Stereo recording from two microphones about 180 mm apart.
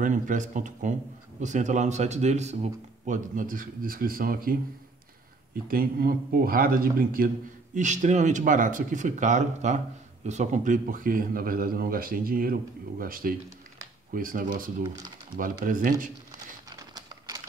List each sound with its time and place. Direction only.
0.0 s speech: 45° right (ahead or behind)
7.7 s speech: 40° right (ahead or behind)
16.6 s crumpling: 20° right (ahead or behind)